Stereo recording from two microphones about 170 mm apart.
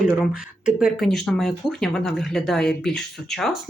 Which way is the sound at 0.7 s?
Centre (ahead or behind).